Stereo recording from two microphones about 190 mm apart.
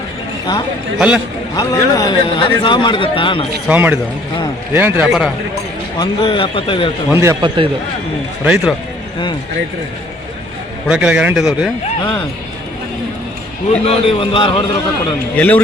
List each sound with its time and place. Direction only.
0.9 s speech: 5° right (ahead or behind)
1.5 s a man's voice: 20° left (ahead or behind)
3.7 s a man's voice: 10° right (ahead or behind)
6.0 s a man's voice: 25° left (ahead or behind)
7.1 s speech: 15° right (ahead or behind)
8.4 s speech: centre (ahead or behind)
10.8 s speech: 5° right (ahead or behind)
13.8 s a man's voice: 30° left (ahead or behind)
15.4 s speech: 10° left (ahead or behind)